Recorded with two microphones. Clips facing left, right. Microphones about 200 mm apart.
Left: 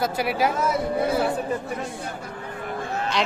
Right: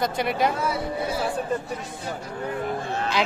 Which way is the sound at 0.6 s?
45° left (ahead or behind).